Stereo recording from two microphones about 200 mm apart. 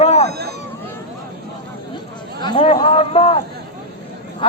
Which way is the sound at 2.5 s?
30° left (ahead or behind).